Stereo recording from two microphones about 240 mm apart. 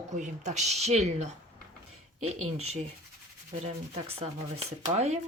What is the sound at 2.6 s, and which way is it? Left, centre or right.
Speech, right.